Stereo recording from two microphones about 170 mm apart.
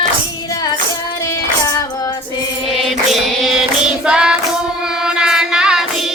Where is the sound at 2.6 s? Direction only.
Centre (ahead or behind).